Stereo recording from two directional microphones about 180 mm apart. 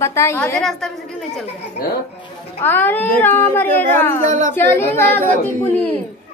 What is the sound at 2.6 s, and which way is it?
A woman's voice, 10° left (ahead or behind).